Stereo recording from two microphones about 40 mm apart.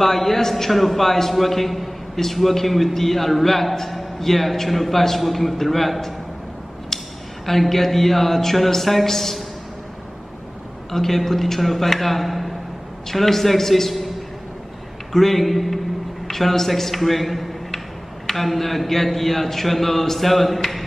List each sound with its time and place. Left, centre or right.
0.0 s a man's voice: centre
6.9 s a sound: centre
7.4 s a man's voice: centre
10.9 s a man's voice: centre
15.1 s a man's voice: centre